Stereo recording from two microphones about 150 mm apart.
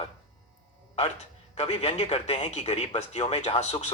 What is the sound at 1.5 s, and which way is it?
A man's voice, 45° left (ahead or behind).